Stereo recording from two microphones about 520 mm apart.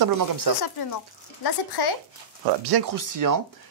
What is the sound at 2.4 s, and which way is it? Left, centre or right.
Speech, right.